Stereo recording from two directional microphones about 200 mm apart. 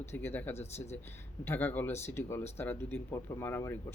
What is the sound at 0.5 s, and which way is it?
Speech, 30° left (ahead or behind).